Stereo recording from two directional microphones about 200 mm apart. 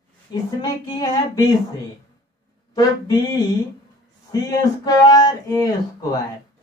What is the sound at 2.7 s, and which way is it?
Speech, 20° left (ahead or behind).